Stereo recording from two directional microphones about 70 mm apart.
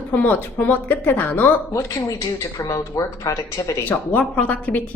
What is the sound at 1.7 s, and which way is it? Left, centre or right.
Speech, left.